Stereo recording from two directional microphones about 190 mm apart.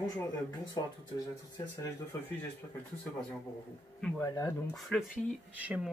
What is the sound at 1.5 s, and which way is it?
Speech, 15° left (ahead or behind).